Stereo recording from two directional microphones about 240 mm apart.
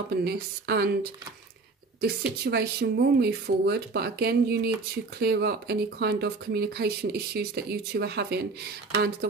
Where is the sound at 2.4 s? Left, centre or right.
Right.